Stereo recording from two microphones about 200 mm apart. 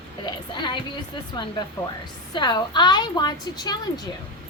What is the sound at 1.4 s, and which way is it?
A woman's voice, 20° left (ahead or behind).